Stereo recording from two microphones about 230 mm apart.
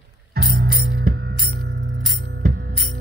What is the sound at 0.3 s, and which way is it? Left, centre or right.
Music, right.